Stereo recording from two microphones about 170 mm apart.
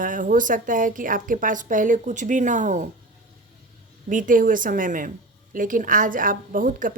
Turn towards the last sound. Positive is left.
turn(degrees=-55)  # may be behind; listen again after turning